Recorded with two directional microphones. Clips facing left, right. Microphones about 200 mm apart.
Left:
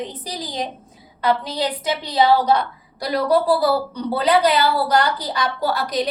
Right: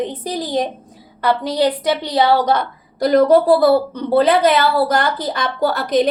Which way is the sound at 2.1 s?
50° right (ahead or behind).